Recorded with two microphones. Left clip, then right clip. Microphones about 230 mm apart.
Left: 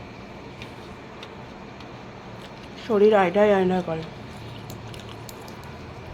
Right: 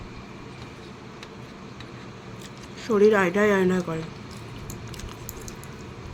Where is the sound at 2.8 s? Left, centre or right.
Centre.